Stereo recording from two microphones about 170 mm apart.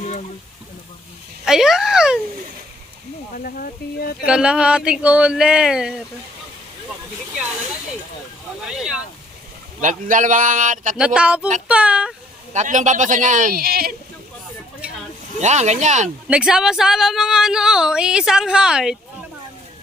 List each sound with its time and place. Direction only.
1.4 s a woman's voice: 5° right (ahead or behind)
3.3 s speech: 55° left (ahead or behind)
4.3 s a woman's voice: 5° right (ahead or behind)
8.6 s a sound: 5° right (ahead or behind)
9.8 s speech: 50° right (ahead or behind)
11.1 s speech: 5° right (ahead or behind)
12.5 s speech: 45° right (ahead or behind); by 13.9 s 60° right (ahead or behind)
15.4 s speech: 40° right (ahead or behind)
16.3 s a woman's voice: 5° right (ahead or behind)